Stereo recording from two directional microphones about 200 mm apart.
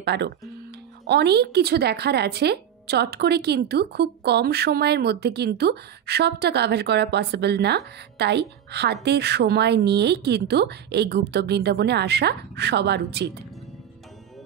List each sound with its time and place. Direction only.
0.0 s speech: 55° right (ahead or behind)